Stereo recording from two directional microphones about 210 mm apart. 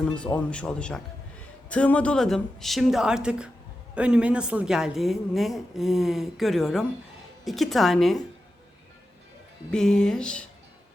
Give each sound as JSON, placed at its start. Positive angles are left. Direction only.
{"t": 0.3, "sound": "a woman's voice", "side_deg": 5}
{"t": 9.7, "sound": "a woman's voice", "side_deg": 5}